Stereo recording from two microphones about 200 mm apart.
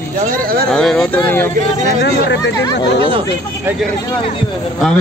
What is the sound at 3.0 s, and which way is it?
Speech, 25° right (ahead or behind).